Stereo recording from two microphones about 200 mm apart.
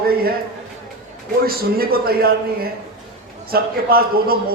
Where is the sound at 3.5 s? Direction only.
50° right (ahead or behind).